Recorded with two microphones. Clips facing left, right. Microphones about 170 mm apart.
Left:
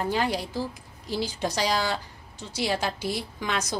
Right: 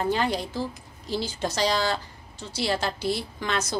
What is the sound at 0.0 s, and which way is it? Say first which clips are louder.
A woman's voice: right 1 dB; 10° left (ahead or behind).